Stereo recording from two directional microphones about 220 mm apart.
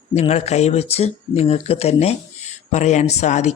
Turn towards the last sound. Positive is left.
turn(degrees=30)  # may be behind; listen again after turning